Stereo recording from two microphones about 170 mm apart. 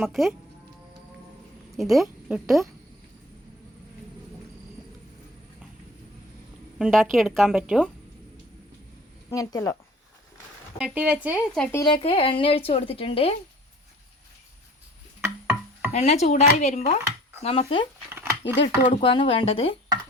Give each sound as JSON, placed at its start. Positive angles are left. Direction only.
{"t": 0.0, "sound": "a woman's voice", "side_deg": 0}
{"t": 1.7, "sound": "speech", "side_deg": 0}
{"t": 6.7, "sound": "a woman's voice", "side_deg": 0}
{"t": 9.3, "sound": "a woman's voice", "side_deg": 20}
{"t": 10.8, "sound": "speech", "side_deg": -5}
{"t": 11.7, "sound": "a woman's voice", "side_deg": 20}
{"t": 11.9, "sound": "a woman's voice", "side_deg": 35}
{"t": 15.2, "sound": "music", "side_deg": -15}
{"t": 15.9, "sound": "a woman's voice", "side_deg": 45}
{"t": 18.1, "sound": "a sound", "side_deg": -15}
{"t": 18.6, "sound": "a woman's voice", "side_deg": 30}